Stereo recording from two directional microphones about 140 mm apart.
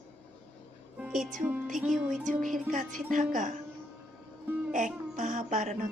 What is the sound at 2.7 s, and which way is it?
Speech, 65° right (ahead or behind).